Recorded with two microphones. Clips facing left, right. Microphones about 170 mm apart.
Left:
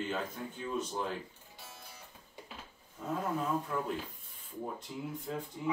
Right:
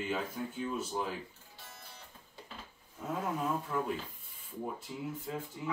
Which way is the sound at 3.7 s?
Centre (ahead or behind).